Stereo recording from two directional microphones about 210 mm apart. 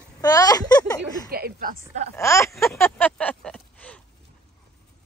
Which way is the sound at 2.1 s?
15° left (ahead or behind).